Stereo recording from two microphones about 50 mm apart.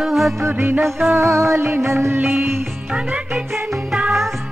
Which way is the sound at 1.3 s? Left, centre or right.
Right.